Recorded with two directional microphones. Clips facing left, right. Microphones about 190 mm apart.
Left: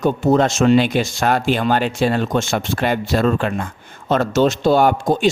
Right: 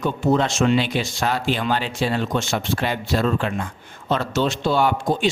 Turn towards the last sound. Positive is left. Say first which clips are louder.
# left 4 dB
turn(degrees=45)  # may be behind; listen again after turning